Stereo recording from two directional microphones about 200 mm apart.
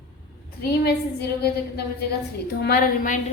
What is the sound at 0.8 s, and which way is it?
A woman's voice, 55° left (ahead or behind).